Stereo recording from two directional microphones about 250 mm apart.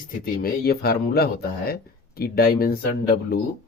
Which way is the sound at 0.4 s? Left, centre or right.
Left.